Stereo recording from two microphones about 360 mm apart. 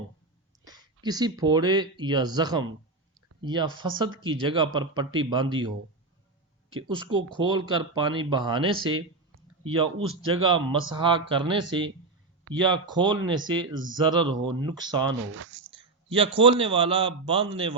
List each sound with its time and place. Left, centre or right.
0.6 s speech: centre
6.8 s speech: centre
10.4 s speech: centre
15.2 s speech: right
16.0 s speech: centre